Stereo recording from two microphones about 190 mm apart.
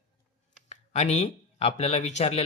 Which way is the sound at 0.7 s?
35° left (ahead or behind).